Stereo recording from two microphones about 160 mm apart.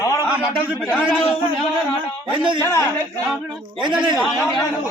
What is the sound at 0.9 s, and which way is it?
Speech, 5° right (ahead or behind).